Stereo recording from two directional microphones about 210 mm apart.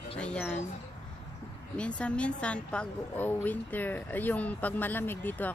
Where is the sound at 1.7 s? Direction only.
5° left (ahead or behind).